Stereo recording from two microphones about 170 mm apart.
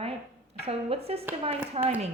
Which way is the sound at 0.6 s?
35° right (ahead or behind).